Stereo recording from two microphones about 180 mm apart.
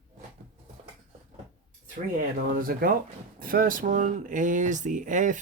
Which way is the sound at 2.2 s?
50° right (ahead or behind).